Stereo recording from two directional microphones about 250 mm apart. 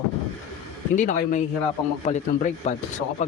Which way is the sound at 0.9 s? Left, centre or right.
Left.